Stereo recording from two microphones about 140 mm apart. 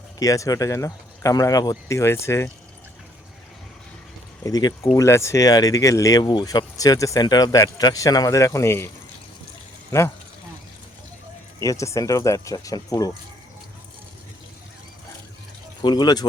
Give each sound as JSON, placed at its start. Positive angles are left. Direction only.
{"t": 0.2, "sound": "speech", "side_deg": 25}
{"t": 4.4, "sound": "speech", "side_deg": 25}
{"t": 11.6, "sound": "speech", "side_deg": 25}
{"t": 15.8, "sound": "speech", "side_deg": 30}